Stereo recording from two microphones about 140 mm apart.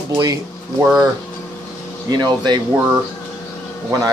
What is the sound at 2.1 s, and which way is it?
Speech, 30° right (ahead or behind).